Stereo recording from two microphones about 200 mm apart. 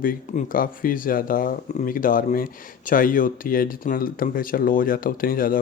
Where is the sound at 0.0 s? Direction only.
45° left (ahead or behind).